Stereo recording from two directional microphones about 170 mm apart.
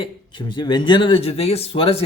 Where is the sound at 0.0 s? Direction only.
25° left (ahead or behind).